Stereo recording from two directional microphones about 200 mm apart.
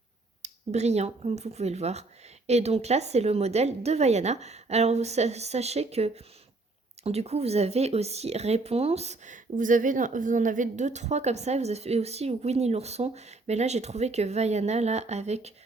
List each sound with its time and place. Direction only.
0.4 s speech: 35° right (ahead or behind)